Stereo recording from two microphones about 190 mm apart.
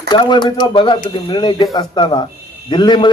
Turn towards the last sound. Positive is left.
turn(degrees=25)  # may be behind; listen again after turning